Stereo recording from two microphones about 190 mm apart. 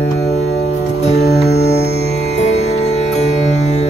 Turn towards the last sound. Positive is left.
turn(degrees=35)  # may be behind; listen again after turning